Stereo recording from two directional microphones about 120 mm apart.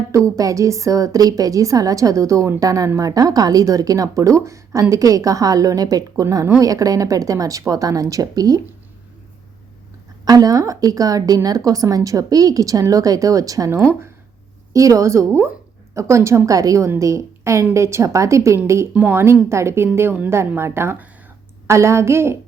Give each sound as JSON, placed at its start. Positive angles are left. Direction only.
{"t": 0.1, "sound": "a woman's voice", "side_deg": -25}
{"t": 10.2, "sound": "a woman's voice", "side_deg": -30}